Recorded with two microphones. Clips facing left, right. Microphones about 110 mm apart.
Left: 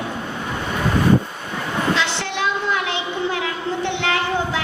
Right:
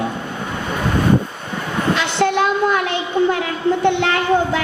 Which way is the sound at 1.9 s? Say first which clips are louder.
Right 6 dB; 50° right (ahead or behind).